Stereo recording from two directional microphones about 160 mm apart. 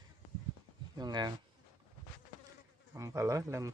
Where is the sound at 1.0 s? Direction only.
25° right (ahead or behind).